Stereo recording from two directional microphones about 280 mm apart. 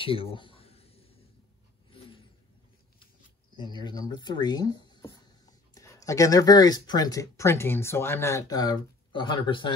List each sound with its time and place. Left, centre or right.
0.0 s a sound: centre
1.9 s vehicle: centre
3.5 s speech: centre